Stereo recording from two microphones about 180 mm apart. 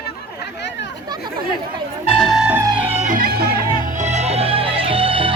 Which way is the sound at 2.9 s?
40° right (ahead or behind).